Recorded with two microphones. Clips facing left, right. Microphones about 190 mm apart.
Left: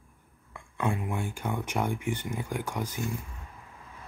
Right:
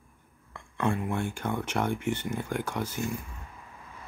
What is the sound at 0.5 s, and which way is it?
Speech, 10° left (ahead or behind).